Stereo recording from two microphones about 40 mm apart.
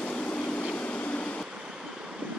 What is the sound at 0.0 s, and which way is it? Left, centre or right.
Vehicle, left.